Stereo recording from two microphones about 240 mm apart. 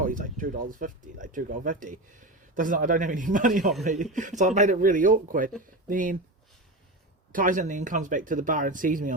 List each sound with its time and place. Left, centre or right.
0.0 s speech: right
7.3 s speech: right